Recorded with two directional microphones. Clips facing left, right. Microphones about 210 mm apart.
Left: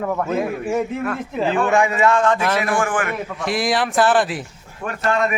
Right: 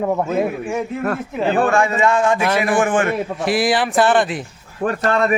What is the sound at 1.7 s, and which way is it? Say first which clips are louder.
Speech: even; 15° left (ahead or behind).